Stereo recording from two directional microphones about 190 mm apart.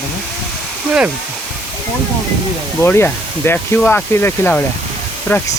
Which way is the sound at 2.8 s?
10° left (ahead or behind).